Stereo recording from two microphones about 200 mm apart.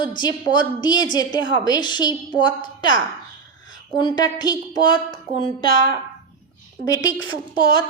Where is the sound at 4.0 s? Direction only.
20° left (ahead or behind).